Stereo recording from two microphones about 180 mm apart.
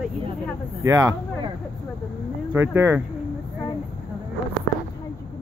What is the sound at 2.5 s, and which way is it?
Speech, 15° right (ahead or behind).